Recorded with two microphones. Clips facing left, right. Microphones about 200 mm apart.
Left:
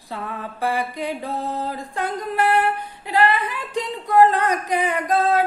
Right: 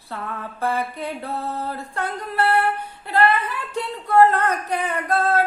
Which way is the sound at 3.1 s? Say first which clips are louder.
Even; 15° left (ahead or behind).